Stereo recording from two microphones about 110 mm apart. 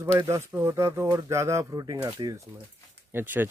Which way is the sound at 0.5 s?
25° right (ahead or behind).